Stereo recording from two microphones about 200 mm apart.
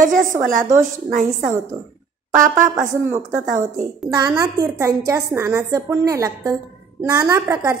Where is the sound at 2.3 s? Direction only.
40° right (ahead or behind).